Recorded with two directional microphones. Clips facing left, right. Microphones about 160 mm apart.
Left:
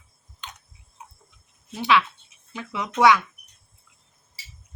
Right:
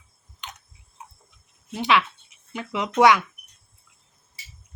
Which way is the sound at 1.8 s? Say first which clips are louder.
Even; 15° right (ahead or behind).